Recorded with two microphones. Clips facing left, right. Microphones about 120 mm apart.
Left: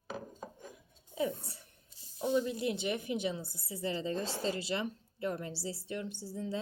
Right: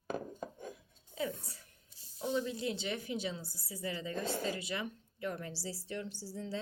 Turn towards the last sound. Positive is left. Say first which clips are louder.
# left 3 dB
turn(degrees=20)  # may be behind; listen again after turning